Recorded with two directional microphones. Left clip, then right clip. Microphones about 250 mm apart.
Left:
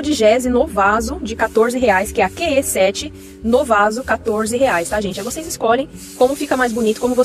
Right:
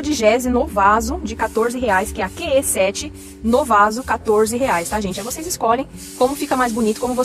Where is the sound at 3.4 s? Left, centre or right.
Centre.